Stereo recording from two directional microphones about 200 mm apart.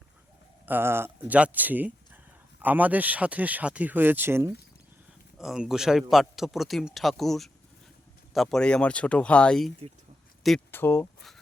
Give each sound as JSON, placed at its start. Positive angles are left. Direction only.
{"t": 0.6, "sound": "speech", "side_deg": -10}
{"t": 5.4, "sound": "a man's voice", "side_deg": 0}